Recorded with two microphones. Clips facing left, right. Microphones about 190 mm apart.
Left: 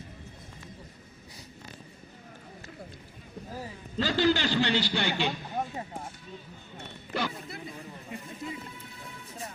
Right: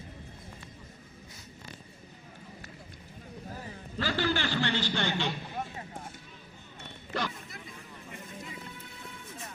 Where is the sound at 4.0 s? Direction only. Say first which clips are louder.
Left 5 dB; 20° left (ahead or behind).